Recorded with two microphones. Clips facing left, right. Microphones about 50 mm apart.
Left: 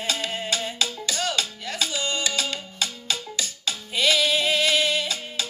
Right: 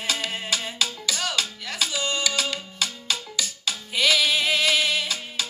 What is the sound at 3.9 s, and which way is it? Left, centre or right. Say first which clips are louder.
Music: even; right.